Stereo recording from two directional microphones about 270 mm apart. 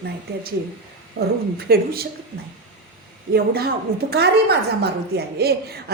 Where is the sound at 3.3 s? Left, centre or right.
Right.